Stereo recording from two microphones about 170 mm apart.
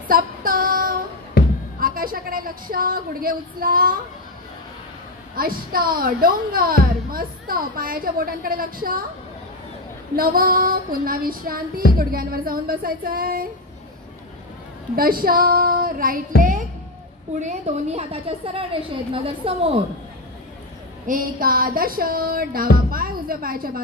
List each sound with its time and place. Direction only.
0.1 s child singing: 55° right (ahead or behind)
1.4 s music: 70° left (ahead or behind)
1.8 s a woman's voice: 55° right (ahead or behind)
5.3 s a woman's voice: 60° right (ahead or behind)
10.1 s a woman's voice: 60° right (ahead or behind)
15.0 s a woman's voice: 60° right (ahead or behind)
17.4 s a woman's voice: 40° right (ahead or behind)
21.1 s a woman's voice: 60° right (ahead or behind)